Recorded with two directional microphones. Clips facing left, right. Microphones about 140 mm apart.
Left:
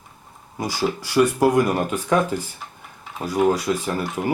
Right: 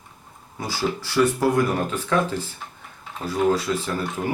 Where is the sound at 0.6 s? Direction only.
15° left (ahead or behind).